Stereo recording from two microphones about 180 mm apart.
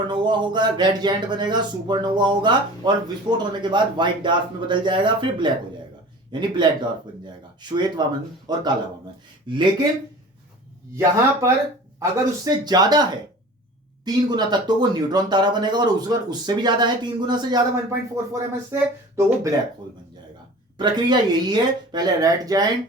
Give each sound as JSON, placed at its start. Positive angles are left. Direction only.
{"t": 0.1, "sound": "speech", "side_deg": -25}
{"t": 10.9, "sound": "speech", "side_deg": -15}
{"t": 20.7, "sound": "speech", "side_deg": -25}